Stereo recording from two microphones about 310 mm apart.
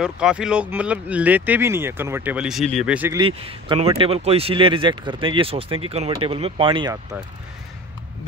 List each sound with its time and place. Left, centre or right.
0.0 s speech: centre